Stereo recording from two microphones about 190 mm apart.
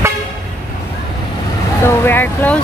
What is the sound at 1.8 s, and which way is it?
Speech, 10° left (ahead or behind).